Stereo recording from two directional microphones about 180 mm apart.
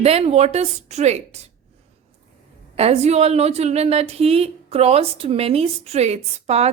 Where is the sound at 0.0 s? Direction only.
35° right (ahead or behind).